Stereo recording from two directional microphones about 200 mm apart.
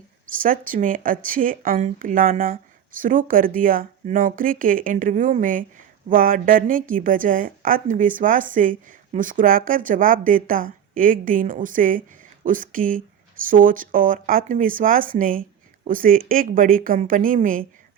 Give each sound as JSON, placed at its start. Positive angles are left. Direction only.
{"t": 0.4, "sound": "a woman's voice", "side_deg": -45}